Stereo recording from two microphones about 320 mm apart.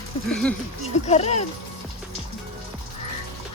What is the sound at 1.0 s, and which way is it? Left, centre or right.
Speech, left.